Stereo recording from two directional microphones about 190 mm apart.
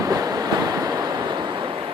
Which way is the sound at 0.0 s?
20° right (ahead or behind).